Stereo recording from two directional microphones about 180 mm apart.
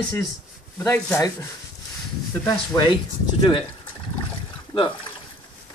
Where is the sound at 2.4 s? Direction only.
20° left (ahead or behind).